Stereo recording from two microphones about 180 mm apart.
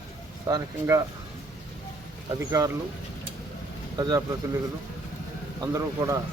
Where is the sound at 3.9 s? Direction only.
20° right (ahead or behind).